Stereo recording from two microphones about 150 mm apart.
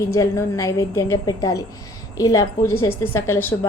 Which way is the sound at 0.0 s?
20° left (ahead or behind).